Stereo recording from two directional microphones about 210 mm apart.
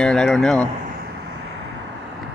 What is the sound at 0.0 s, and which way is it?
Speech, 5° left (ahead or behind).